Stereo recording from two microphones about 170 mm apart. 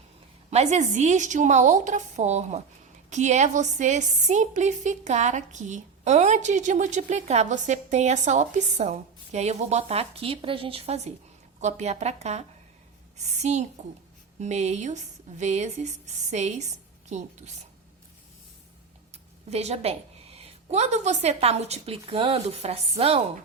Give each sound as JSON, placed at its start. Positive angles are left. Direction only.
{"t": 0.5, "sound": "a woman's voice", "side_deg": -40}
{"t": 19.1, "sound": "a woman's voice", "side_deg": -40}